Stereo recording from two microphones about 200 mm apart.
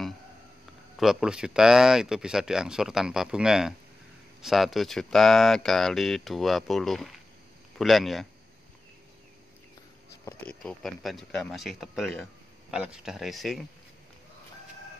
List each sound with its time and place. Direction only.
0.9 s speech: 5° right (ahead or behind)
10.2 s speech: 5° left (ahead or behind)